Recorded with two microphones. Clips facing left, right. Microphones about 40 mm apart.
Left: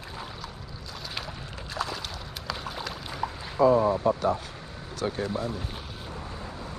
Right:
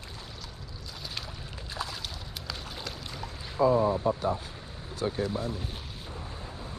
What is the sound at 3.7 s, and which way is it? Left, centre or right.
Speech, left.